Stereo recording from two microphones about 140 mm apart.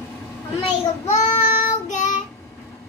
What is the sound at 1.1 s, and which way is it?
Child singing, 55° left (ahead or behind).